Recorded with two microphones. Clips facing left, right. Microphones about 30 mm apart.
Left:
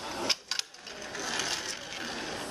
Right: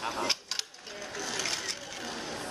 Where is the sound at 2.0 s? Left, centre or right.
Centre.